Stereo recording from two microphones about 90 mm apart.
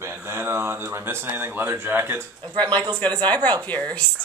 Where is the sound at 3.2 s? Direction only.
15° left (ahead or behind).